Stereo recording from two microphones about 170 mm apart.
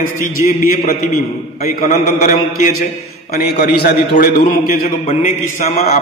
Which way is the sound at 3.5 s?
70° left (ahead or behind).